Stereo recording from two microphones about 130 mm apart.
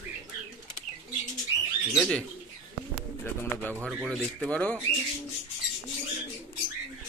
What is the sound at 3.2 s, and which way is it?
Speech, 15° left (ahead or behind).